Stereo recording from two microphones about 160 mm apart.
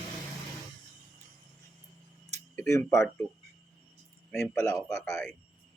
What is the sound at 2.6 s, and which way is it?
Speech, 15° left (ahead or behind).